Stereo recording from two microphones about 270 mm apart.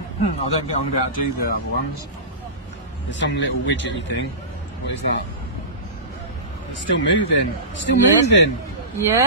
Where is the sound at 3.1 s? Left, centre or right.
Left.